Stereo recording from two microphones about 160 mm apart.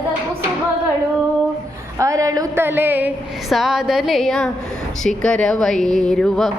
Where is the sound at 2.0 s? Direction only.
20° right (ahead or behind).